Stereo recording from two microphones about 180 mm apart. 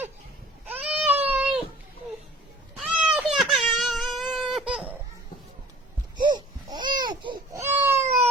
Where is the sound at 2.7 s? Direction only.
5° right (ahead or behind).